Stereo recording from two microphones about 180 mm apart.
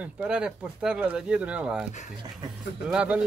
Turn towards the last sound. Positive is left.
turn(degrees=-5)  # may be behind; listen again after turning